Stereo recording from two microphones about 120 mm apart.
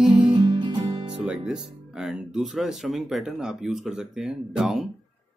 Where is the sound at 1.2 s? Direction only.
5° right (ahead or behind).